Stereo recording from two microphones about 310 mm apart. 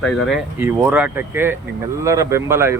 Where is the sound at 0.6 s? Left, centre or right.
Centre.